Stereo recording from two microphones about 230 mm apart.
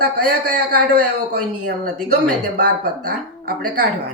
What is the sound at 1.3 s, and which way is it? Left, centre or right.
Speech, right.